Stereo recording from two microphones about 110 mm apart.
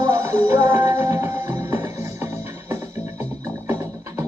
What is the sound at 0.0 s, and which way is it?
Music, 30° right (ahead or behind).